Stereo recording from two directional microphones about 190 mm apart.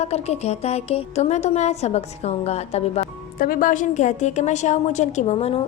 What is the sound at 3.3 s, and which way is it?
A woman's voice, 50° left (ahead or behind).